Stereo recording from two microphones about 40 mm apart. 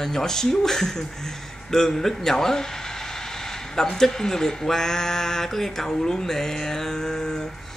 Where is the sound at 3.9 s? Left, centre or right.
Centre.